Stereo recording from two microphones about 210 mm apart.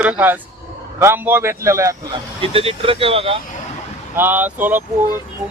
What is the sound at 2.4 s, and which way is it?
Speech, 25° right (ahead or behind).